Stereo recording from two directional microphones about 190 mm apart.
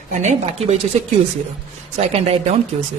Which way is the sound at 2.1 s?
35° right (ahead or behind).